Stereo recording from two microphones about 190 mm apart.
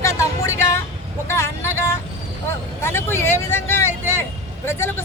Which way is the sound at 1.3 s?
15° left (ahead or behind).